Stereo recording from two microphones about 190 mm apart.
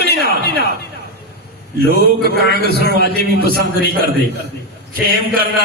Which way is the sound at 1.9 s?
55° right (ahead or behind).